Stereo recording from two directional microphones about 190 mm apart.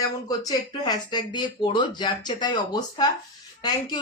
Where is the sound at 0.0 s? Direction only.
20° left (ahead or behind).